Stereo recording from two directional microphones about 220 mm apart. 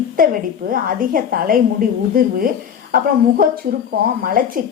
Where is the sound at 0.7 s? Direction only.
40° right (ahead or behind).